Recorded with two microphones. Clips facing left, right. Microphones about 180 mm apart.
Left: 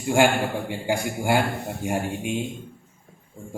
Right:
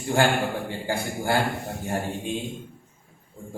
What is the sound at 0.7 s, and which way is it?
A man's voice, 15° left (ahead or behind).